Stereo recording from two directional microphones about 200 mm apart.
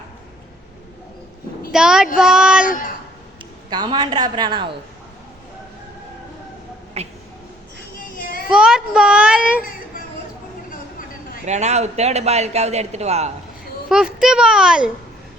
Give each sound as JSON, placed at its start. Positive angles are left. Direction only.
{"t": 1.7, "sound": "a child's voice", "side_deg": -5}
{"t": 2.6, "sound": "a sound", "side_deg": 40}
{"t": 3.7, "sound": "a woman's voice", "side_deg": -20}
{"t": 7.0, "sound": "speech", "side_deg": -30}
{"t": 8.2, "sound": "a sound", "side_deg": 45}
{"t": 8.4, "sound": "a child's voice", "side_deg": -5}
{"t": 10.7, "sound": "a sound", "side_deg": 45}
{"t": 11.4, "sound": "a man's voice", "side_deg": -35}
{"t": 13.9, "sound": "a child's voice", "side_deg": -5}